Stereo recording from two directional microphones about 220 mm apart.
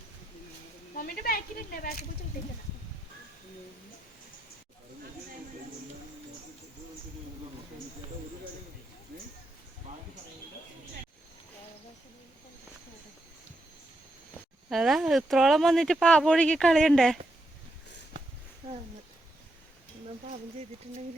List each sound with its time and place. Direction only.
0.9 s speech: 40° left (ahead or behind)
14.7 s speech: centre (ahead or behind)